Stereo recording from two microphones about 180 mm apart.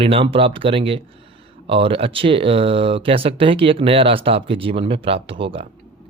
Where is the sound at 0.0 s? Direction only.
30° right (ahead or behind).